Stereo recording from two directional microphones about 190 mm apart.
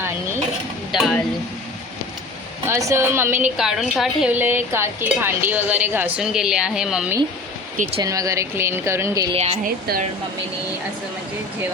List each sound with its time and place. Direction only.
0.9 s a sound: centre (ahead or behind)
2.6 s a woman's voice: 15° right (ahead or behind)
7.8 s speech: 35° right (ahead or behind)
8.0 s a woman's voice: 20° right (ahead or behind)
9.3 s speech: 35° right (ahead or behind)